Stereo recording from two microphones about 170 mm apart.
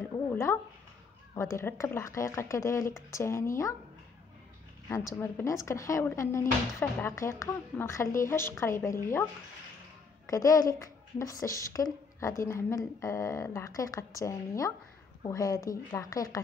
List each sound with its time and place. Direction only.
0.1 s a sound: 15° left (ahead or behind)
1.3 s a woman's voice: 15° left (ahead or behind)
4.8 s a woman's voice: 15° left (ahead or behind)
10.2 s a woman's voice: 20° left (ahead or behind)